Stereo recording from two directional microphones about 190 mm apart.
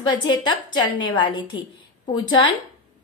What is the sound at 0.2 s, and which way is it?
A woman's voice, 25° left (ahead or behind).